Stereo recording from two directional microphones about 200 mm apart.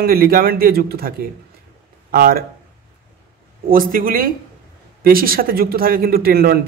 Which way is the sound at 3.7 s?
45° right (ahead or behind).